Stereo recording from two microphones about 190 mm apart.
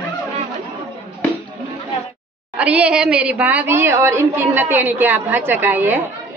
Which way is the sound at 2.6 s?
5° right (ahead or behind).